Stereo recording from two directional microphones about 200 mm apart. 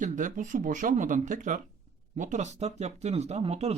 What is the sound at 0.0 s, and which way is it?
Speech, 40° right (ahead or behind).